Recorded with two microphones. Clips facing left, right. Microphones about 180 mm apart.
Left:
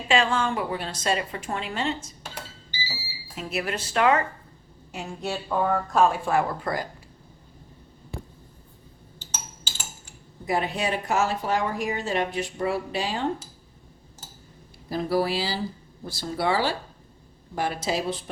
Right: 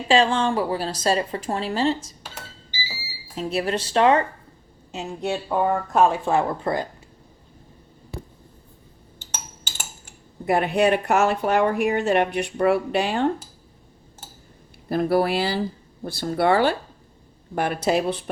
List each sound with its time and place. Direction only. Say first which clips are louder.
0.1 s a woman's voice: right 4 dB; 30° right (ahead or behind)
2.0 s speech: even; centre (ahead or behind)
3.3 s speech: right 5 dB; 30° right (ahead or behind)
9.3 s a sound: right 2 dB; 55° right (ahead or behind)
10.4 s speech: right 7 dB; 60° right (ahead or behind)
14.8 s speech: right 4 dB; 60° right (ahead or behind)